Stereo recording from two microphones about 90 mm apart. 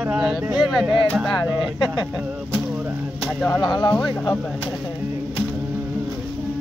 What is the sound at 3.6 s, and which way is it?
Speech, 55° left (ahead or behind).